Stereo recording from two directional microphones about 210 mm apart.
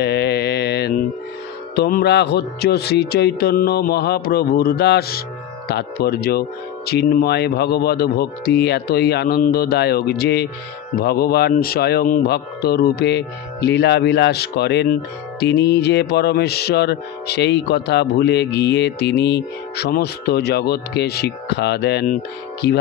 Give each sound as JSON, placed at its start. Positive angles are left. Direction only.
{"t": 0.0, "sound": "mantra", "side_deg": 50}
{"t": 1.8, "sound": "music", "side_deg": 50}